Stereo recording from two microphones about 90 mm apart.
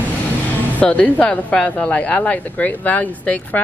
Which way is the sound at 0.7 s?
15° left (ahead or behind).